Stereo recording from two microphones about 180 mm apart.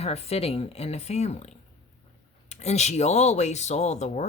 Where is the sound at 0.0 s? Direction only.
35° left (ahead or behind).